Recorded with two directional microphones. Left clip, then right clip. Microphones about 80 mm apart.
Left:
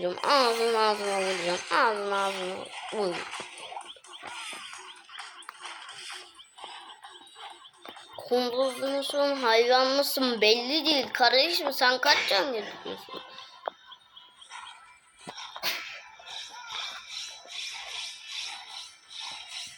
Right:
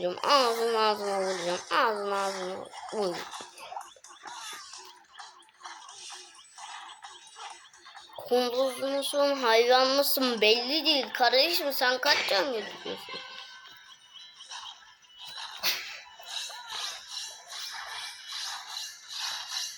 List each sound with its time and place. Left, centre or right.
0.0 s speech: centre
2.1 s speech: right
3.0 s a sound: centre
5.7 s music: left
8.2 s speech: centre
13.1 s music: right
16.2 s a sound: left
19.2 s music: left